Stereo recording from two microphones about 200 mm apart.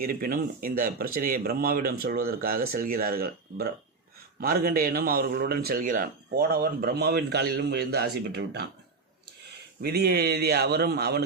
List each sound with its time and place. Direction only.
0.0 s speech: 45° right (ahead or behind)
9.8 s speech: 55° right (ahead or behind)